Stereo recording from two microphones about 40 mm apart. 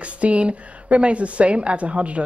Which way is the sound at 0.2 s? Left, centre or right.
Right.